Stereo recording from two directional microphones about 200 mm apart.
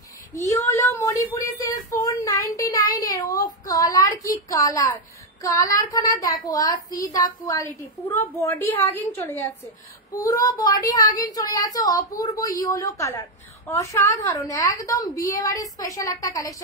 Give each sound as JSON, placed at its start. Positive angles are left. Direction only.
{"t": 0.3, "sound": "speech", "side_deg": 15}